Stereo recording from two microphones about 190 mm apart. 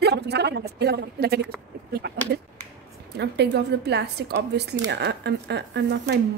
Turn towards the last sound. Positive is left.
turn(degrees=-60)  # may be behind; listen again after turning